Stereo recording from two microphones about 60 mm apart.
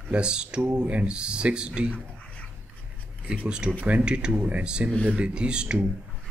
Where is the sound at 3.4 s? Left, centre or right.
Centre.